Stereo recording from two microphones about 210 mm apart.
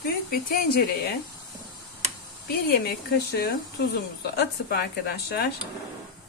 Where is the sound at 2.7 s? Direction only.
50° left (ahead or behind).